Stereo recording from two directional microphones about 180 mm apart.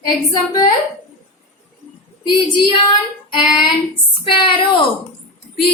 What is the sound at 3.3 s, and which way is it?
Child singing, 25° left (ahead or behind).